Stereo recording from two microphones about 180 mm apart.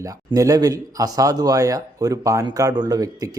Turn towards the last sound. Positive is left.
turn(degrees=-20)  # may be behind; listen again after turning